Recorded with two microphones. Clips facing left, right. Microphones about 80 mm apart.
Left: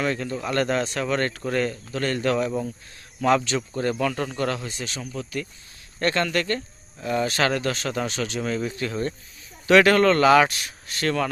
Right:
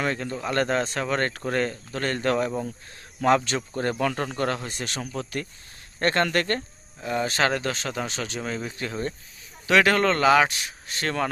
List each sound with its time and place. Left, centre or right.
0.0 s speech: right
4.7 s speech: right
6.0 s speech: right
7.0 s speech: centre
10.8 s speech: right